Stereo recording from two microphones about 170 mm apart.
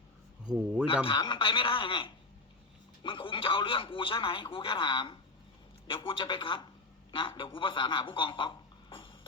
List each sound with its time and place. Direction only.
0.4 s speech: 5° right (ahead or behind)
1.0 s a man's voice: 30° left (ahead or behind)